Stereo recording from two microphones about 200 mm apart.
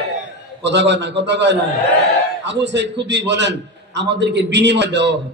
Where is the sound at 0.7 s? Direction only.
60° right (ahead or behind).